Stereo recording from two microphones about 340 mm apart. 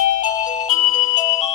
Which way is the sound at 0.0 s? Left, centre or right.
Left.